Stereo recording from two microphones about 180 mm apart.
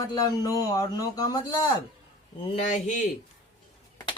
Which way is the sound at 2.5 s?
40° left (ahead or behind).